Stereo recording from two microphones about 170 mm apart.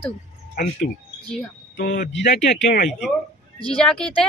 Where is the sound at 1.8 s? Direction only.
55° left (ahead or behind).